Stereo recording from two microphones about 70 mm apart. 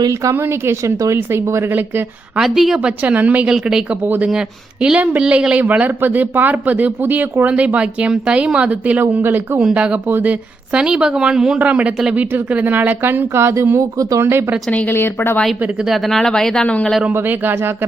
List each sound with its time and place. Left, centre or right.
0.1 s a woman's voice: right
0.3 s speech: right
2.4 s speech: centre
3.0 s speech: right
3.5 s speech: centre
4.0 s speech: right
4.3 s speech: centre; by 9.6 s right
9.6 s speech: centre
10.1 s speech: right
10.7 s speech: centre; by 14.4 s right
14.7 s a woman's voice: centre
14.9 s speech: left
15.9 s speech: centre
17.1 s speech: right